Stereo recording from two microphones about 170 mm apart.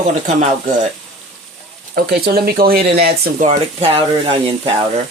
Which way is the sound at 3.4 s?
40° right (ahead or behind).